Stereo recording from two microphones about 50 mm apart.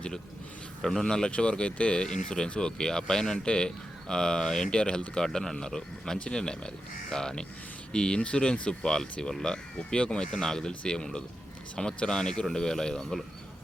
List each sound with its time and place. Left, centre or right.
0.8 s speech: centre